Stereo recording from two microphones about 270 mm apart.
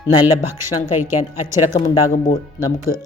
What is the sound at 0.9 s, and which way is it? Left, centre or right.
Speech, centre.